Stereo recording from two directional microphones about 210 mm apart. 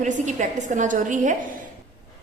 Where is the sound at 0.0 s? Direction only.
35° right (ahead or behind).